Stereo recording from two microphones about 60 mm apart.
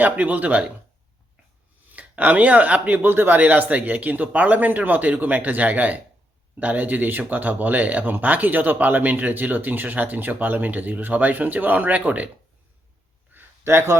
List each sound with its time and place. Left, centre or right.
0.0 s speech: right
1.9 s speech: right
13.3 s a sound: right